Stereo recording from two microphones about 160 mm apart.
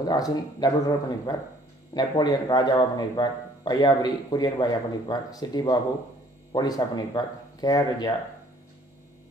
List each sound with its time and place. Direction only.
0.0 s speech: 25° left (ahead or behind)